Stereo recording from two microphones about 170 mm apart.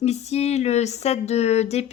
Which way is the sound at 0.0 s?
40° left (ahead or behind).